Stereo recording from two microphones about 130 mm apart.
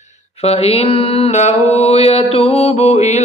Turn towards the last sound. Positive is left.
turn(degrees=60)  # may be behind; listen again after turning